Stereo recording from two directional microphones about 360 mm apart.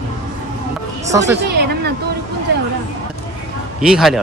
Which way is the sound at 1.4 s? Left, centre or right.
Right.